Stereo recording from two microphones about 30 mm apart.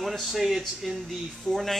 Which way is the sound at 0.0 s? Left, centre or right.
Centre.